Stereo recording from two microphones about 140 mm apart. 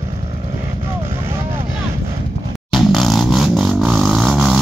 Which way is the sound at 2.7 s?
Centre (ahead or behind).